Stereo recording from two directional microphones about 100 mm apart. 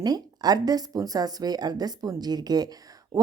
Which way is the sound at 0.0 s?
40° right (ahead or behind).